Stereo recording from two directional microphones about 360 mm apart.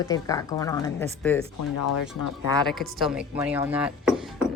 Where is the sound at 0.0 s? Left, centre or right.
Centre.